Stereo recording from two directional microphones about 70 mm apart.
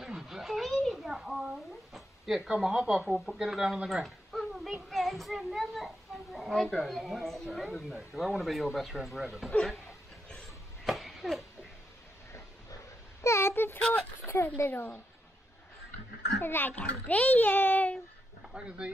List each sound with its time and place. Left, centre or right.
0.0 s a sound: centre
2.5 s a woman's voice: centre
4.8 s child singing: centre
6.3 s a woman's voice: centre
10.9 s a sound: centre
13.2 s a sound: left
13.7 s speech: centre
14.2 s speech: left
16.4 s a child's voice: left
18.5 s speech: centre